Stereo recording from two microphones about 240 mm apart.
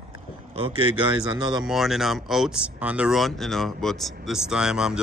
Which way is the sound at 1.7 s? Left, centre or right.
Centre.